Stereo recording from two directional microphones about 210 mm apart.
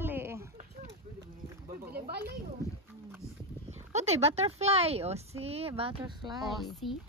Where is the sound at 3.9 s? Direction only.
30° right (ahead or behind).